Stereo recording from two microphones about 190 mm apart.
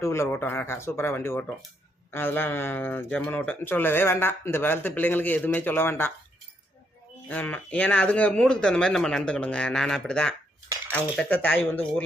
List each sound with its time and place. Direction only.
0.0 s speech: 15° left (ahead or behind)
7.3 s speech: 10° left (ahead or behind)